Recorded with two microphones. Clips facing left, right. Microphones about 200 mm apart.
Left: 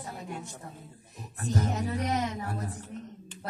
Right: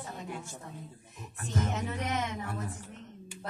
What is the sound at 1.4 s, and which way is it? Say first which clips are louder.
Speech: left 3 dB; 40° left (ahead or behind).